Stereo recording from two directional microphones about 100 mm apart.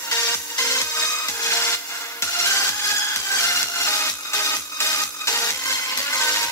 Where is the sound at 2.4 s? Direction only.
30° left (ahead or behind).